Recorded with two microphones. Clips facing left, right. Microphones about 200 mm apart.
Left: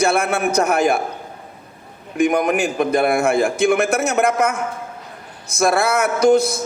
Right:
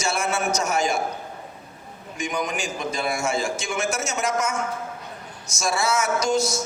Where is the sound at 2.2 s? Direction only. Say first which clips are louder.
Left 11 dB; 60° left (ahead or behind).